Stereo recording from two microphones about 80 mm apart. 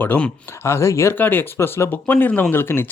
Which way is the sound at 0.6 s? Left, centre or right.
Left.